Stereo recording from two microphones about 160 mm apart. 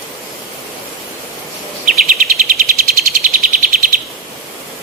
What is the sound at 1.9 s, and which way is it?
Bird vocalization, 60° right (ahead or behind).